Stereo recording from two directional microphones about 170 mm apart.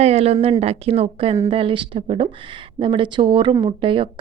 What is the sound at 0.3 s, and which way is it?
Speech, 25° right (ahead or behind).